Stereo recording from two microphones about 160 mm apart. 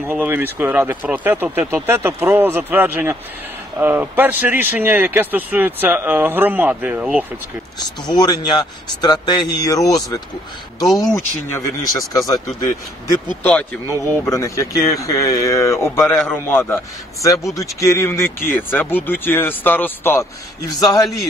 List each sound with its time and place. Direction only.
0.0 s speech: 10° right (ahead or behind)
8.1 s speech: 25° left (ahead or behind)
10.9 s speech: centre (ahead or behind)
11.1 s speech: 20° left (ahead or behind)
13.4 s speech: 5° left (ahead or behind)
14.3 s speech: 20° left (ahead or behind)